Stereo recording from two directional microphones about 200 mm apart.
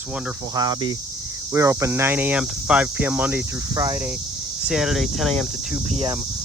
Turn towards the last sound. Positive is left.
turn(degrees=-30)  # may be behind; listen again after turning